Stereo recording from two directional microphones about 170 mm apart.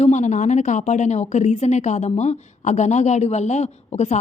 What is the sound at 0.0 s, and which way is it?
A woman's voice, 45° left (ahead or behind).